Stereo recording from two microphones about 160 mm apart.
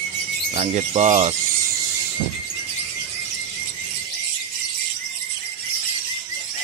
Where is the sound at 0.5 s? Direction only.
45° right (ahead or behind).